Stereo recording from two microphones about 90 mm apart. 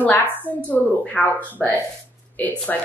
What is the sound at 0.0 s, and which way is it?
A woman's voice, 20° left (ahead or behind).